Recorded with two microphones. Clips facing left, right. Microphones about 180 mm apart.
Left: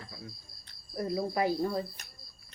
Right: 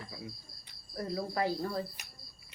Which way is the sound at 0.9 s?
20° left (ahead or behind).